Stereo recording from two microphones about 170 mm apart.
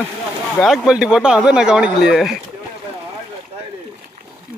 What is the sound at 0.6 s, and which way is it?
Speech, 5° right (ahead or behind).